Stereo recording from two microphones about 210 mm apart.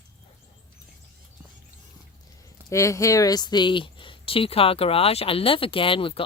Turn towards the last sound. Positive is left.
turn(degrees=25)  # may be behind; listen again after turning